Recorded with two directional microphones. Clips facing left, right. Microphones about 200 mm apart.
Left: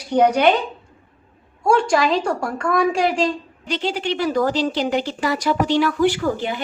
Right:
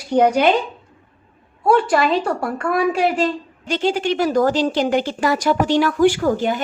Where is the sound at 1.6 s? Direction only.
5° right (ahead or behind).